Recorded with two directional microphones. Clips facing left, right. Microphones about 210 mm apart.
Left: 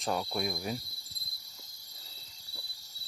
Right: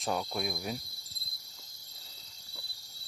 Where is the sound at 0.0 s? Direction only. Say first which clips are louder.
Left 1 dB; centre (ahead or behind).